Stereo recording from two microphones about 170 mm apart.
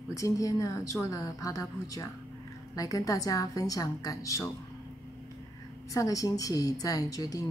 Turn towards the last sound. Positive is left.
turn(degrees=20)  # may be behind; listen again after turning